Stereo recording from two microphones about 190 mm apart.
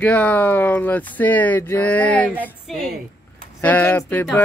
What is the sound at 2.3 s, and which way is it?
Speech, 5° right (ahead or behind).